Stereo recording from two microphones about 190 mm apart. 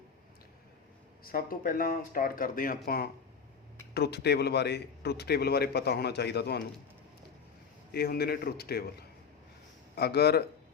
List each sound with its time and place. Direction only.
1.2 s a man's voice: 50° left (ahead or behind)
7.9 s a man's voice: 55° left (ahead or behind)